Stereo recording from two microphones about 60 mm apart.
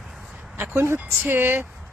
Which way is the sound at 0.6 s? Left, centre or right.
Right.